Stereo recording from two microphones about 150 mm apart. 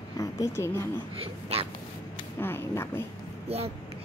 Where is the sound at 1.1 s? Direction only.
40° right (ahead or behind).